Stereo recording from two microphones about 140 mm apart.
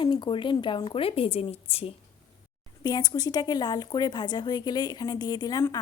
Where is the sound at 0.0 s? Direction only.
35° left (ahead or behind).